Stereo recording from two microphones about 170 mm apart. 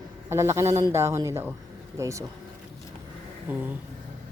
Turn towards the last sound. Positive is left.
turn(degrees=-10)  # may be behind; listen again after turning